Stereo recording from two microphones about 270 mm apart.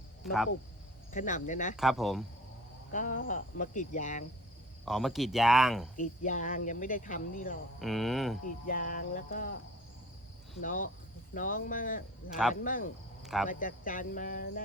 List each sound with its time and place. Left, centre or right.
0.2 s speech: centre
1.1 s cricket: left
1.7 s speech: centre
2.9 s cricket: left
4.9 s speech: centre
6.0 s cricket: left
7.8 s speech: centre
8.6 s speech: left
10.6 s cricket: left
11.3 s speech: left
13.2 s speech: centre
13.5 s speech: left